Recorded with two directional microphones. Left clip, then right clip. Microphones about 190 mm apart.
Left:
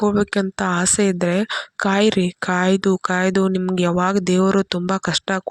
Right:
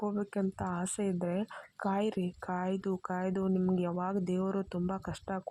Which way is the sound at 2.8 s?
55° left (ahead or behind).